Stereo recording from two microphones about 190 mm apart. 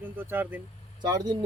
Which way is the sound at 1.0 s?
20° right (ahead or behind).